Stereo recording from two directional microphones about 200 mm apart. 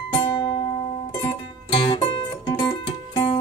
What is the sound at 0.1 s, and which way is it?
Music, 20° left (ahead or behind).